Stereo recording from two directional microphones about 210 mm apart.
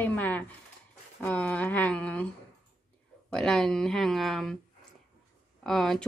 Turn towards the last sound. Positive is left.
turn(degrees=0)  # may be behind; listen again after turning